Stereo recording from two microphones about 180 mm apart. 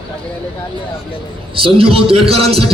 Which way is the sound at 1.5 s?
30° right (ahead or behind).